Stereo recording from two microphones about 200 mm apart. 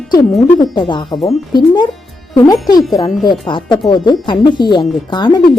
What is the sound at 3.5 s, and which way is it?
Speech, 20° left (ahead or behind).